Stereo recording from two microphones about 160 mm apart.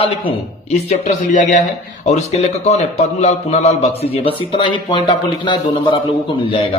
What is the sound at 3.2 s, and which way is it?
Speech, 45° left (ahead or behind).